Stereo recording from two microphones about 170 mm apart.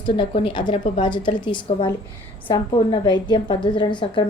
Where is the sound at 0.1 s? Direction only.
30° left (ahead or behind).